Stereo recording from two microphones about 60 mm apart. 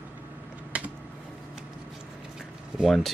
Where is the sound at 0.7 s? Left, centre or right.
Right.